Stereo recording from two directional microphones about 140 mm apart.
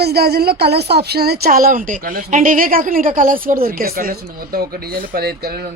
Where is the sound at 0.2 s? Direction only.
90° right.